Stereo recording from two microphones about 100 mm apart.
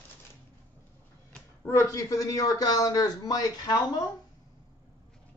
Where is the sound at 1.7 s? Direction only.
30° left (ahead or behind).